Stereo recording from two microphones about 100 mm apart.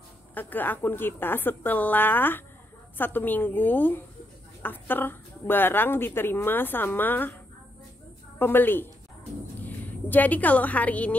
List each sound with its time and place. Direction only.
0.3 s speech: 20° left (ahead or behind)
8.4 s a woman's voice: 20° left (ahead or behind)